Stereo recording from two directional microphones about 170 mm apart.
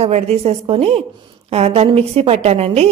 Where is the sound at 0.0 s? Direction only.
40° right (ahead or behind).